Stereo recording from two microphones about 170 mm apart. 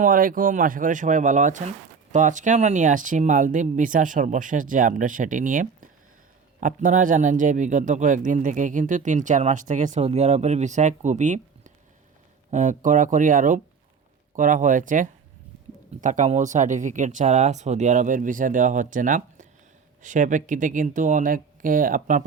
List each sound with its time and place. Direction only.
0.0 s speech: 55° right (ahead or behind)